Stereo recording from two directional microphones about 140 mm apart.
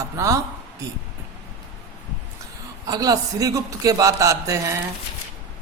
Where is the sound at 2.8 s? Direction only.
25° right (ahead or behind).